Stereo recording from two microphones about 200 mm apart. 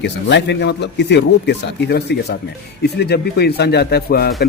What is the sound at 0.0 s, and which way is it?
Speech, 60° left (ahead or behind).